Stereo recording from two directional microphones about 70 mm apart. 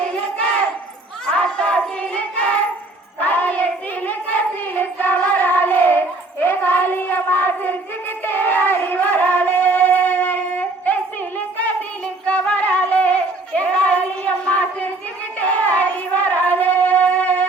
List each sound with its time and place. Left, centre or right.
1.3 s a sound: centre
3.2 s hands: left
4.7 s child singing: left
8.2 s music: left
12.2 s a sound: centre
15.4 s child singing: left